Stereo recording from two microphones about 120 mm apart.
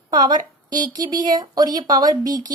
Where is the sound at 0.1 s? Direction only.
35° right (ahead or behind).